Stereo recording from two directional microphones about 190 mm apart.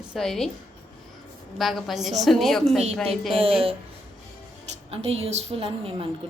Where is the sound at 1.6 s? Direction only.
Centre (ahead or behind).